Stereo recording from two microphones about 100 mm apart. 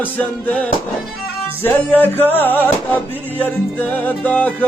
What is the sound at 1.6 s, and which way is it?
Music, 20° left (ahead or behind).